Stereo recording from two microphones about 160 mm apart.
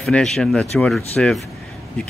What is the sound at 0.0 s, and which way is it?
Speech, centre (ahead or behind).